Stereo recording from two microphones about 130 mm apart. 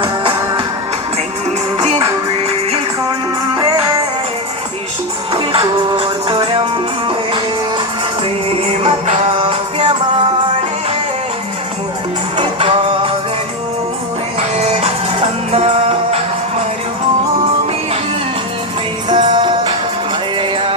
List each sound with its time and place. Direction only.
0.0 s music: 40° right (ahead or behind)
5.3 s music: 40° right (ahead or behind)
8.8 s music: 50° right (ahead or behind)
12.4 s music: 45° right (ahead or behind)
14.3 s music: 55° right (ahead or behind)
19.0 s music: 40° right (ahead or behind)